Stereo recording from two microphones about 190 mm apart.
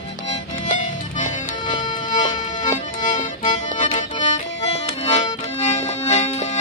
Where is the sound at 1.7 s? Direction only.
25° left (ahead or behind).